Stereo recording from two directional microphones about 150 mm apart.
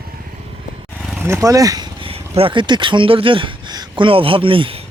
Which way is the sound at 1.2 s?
20° right (ahead or behind).